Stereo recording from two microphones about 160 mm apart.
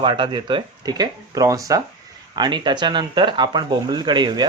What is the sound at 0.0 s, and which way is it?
Speech, 30° right (ahead or behind).